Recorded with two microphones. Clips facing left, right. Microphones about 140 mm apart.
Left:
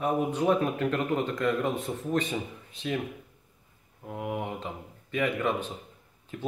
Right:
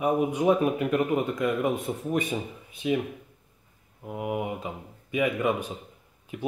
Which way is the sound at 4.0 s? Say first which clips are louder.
Right 3 dB; 5° right (ahead or behind).